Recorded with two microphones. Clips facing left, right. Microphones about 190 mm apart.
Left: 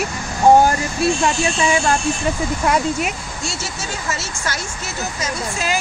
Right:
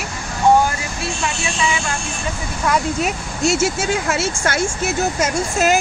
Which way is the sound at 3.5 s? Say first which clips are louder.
Right 10 dB; 55° right (ahead or behind).